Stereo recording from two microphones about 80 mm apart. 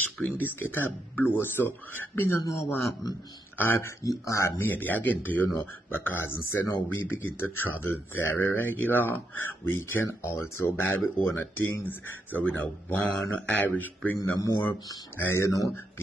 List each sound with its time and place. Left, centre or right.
0.0 s speech: left
3.5 s speech: left
4.0 s speech: left
4.6 s speech: left
15.1 s speech: left